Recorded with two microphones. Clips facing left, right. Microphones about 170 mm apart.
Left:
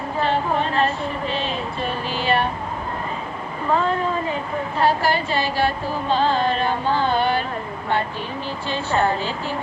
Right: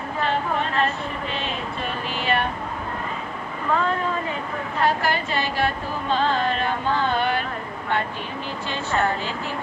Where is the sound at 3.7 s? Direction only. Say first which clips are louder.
Left 2 dB; 30° left (ahead or behind).